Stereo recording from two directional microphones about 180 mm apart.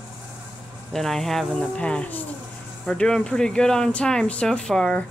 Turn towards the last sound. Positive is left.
turn(degrees=5)  # may be behind; listen again after turning